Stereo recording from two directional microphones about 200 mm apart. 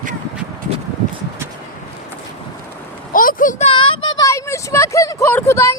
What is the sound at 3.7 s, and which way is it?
Child singing, 25° left (ahead or behind).